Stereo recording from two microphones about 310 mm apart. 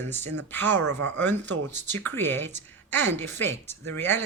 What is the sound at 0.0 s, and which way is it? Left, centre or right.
Speech, centre.